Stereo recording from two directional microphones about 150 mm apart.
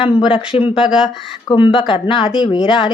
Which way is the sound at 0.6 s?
5° right (ahead or behind).